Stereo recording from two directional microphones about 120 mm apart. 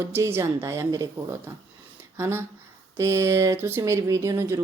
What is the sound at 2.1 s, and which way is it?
A woman's voice, 20° right (ahead or behind).